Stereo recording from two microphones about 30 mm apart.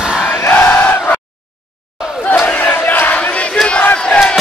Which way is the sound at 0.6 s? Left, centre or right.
Left.